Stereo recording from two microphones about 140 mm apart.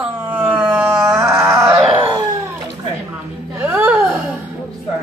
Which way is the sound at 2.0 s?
35° right (ahead or behind).